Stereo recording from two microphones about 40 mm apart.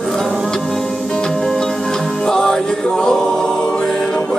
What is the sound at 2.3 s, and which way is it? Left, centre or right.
Music, centre.